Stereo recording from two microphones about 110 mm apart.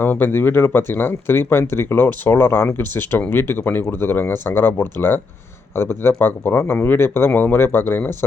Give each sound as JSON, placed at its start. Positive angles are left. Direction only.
{"t": 0.0, "sound": "speech", "side_deg": 20}